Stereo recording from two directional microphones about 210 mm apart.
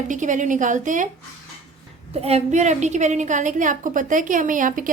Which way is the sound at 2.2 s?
30° right (ahead or behind).